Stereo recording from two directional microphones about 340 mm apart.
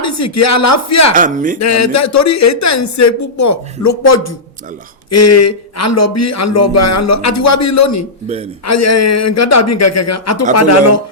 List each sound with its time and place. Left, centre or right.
0.0 s speech: left
1.1 s speech: right
1.5 s speech: left